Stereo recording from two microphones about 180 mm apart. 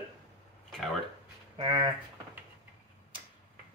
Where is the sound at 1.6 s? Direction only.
30° right (ahead or behind).